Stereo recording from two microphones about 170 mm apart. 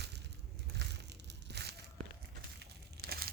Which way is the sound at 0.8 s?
85° right.